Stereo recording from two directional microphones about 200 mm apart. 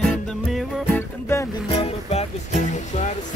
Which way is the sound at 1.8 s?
30° left (ahead or behind).